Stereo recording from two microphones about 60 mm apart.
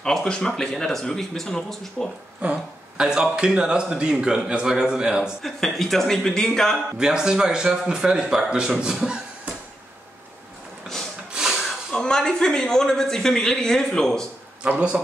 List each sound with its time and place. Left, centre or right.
0.0 s speech: centre
2.4 s speech: right
3.0 s speech: centre
5.4 s speech: centre
7.0 s speech: centre
11.3 s a sound: centre
11.9 s speech: centre